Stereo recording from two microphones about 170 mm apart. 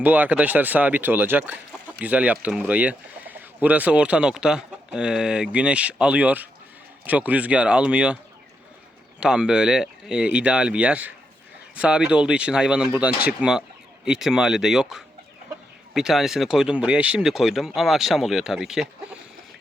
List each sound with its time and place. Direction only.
0.0 s speech: 10° right (ahead or behind)
9.2 s speech: 5° right (ahead or behind)